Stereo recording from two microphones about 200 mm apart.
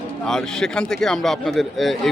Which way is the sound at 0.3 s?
5° left (ahead or behind).